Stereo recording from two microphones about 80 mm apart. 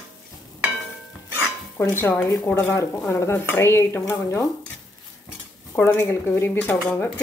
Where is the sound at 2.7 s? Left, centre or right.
Left.